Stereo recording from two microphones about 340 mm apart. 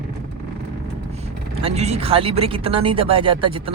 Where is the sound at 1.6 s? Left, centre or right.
Centre.